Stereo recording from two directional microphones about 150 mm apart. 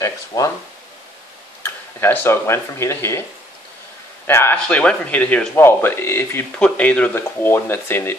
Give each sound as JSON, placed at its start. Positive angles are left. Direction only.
{"t": 0.3, "sound": "speech", "side_deg": 20}
{"t": 1.6, "sound": "speech", "side_deg": 15}
{"t": 4.3, "sound": "speech", "side_deg": 15}